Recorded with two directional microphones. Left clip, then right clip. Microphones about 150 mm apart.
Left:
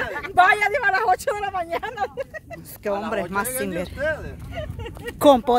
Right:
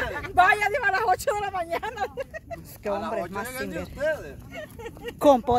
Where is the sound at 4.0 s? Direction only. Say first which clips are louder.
Left 1 dB; 45° right (ahead or behind).